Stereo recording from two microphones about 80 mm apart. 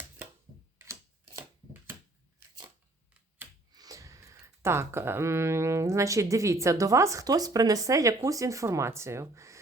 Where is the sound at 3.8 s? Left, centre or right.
Right.